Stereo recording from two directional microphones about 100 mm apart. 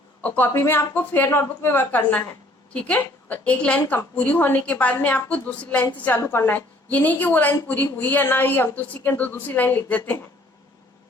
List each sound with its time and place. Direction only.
0.2 s a woman's voice: 15° left (ahead or behind)